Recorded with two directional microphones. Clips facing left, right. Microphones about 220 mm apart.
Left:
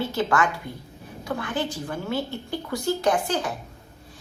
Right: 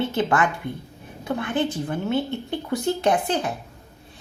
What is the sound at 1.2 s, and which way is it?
A woman's voice, 20° right (ahead or behind).